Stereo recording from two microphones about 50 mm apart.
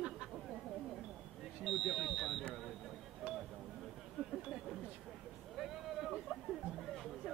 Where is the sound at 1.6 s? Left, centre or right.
Centre.